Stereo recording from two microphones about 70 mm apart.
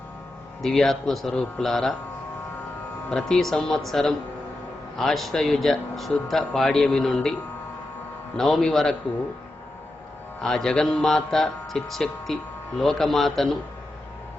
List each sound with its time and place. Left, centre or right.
0.6 s speech: centre
3.1 s speech: centre
8.4 s speech: centre
10.4 s speech: centre